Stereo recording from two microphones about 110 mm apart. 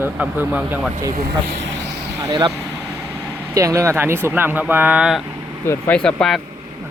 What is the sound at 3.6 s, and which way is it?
Speech, 30° right (ahead or behind).